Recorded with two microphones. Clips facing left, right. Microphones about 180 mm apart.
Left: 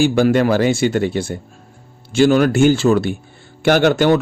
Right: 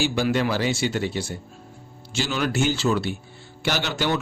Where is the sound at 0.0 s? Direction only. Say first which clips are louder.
Left 9 dB; 50° left (ahead or behind).